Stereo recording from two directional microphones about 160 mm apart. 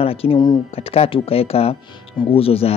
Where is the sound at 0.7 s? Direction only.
40° left (ahead or behind).